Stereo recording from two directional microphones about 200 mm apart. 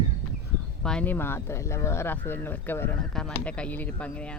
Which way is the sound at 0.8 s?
5° left (ahead or behind).